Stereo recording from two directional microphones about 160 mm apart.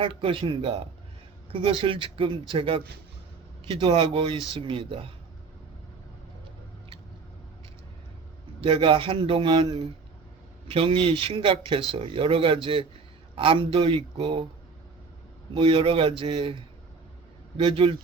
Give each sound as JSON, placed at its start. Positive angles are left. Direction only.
{"t": 0.0, "sound": "speech", "side_deg": -35}
{"t": 8.6, "sound": "speech", "side_deg": -35}
{"t": 15.5, "sound": "speech", "side_deg": -35}